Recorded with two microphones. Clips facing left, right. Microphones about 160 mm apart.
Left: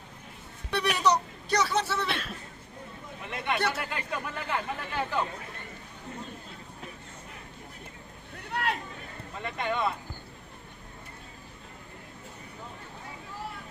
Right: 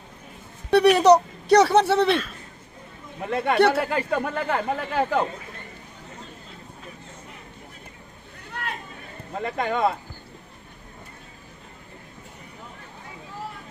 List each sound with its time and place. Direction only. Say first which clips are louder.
0.7 s speech: right 11 dB; 60° right (ahead or behind)
3.2 s speech: right 11 dB; 45° right (ahead or behind)
3.5 s speech: right 10 dB; 60° right (ahead or behind)
9.3 s speech: right 6 dB; 45° right (ahead or behind)